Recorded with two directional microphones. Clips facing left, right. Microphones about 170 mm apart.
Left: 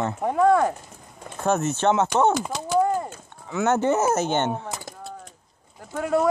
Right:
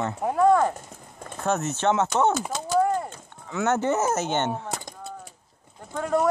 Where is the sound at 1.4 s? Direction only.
30° left (ahead or behind).